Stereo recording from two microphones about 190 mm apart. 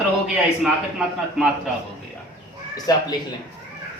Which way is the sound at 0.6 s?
5° right (ahead or behind).